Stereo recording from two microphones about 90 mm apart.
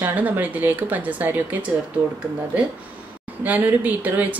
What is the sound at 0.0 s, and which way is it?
A woman's voice, 20° right (ahead or behind).